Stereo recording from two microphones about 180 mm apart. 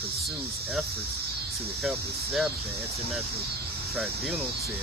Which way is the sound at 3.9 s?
Centre (ahead or behind).